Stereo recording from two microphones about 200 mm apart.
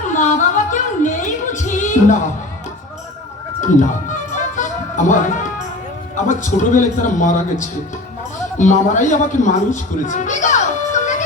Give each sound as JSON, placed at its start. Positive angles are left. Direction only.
{"t": 0.1, "sound": "yodeling", "side_deg": 40}
{"t": 4.1, "sound": "music", "side_deg": 40}
{"t": 6.1, "sound": "a man's voice", "side_deg": 40}